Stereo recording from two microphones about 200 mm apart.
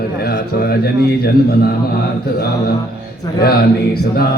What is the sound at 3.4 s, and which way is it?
Speech, 50° left (ahead or behind).